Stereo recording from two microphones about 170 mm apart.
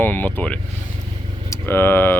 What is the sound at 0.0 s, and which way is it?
Speech, 10° left (ahead or behind).